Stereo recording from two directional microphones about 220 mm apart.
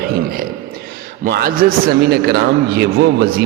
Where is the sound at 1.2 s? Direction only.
40° right (ahead or behind).